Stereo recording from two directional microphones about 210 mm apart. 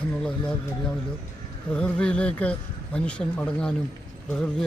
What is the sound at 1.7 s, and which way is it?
Speech, 5° left (ahead or behind).